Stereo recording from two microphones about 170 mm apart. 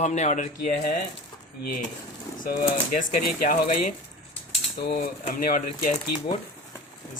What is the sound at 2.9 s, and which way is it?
Speech, 50° left (ahead or behind).